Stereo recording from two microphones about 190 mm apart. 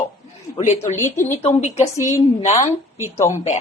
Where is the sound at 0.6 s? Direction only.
35° left (ahead or behind).